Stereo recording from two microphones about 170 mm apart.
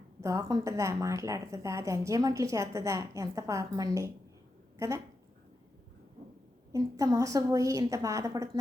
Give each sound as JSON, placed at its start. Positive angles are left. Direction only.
{"t": 0.2, "sound": "a woman's voice", "side_deg": -20}
{"t": 6.7, "sound": "a woman's voice", "side_deg": -20}